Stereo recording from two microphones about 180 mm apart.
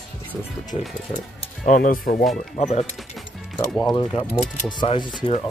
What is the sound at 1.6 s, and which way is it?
Speech, 50° left (ahead or behind).